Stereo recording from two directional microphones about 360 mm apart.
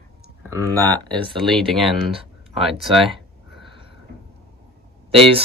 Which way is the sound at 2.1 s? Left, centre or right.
Centre.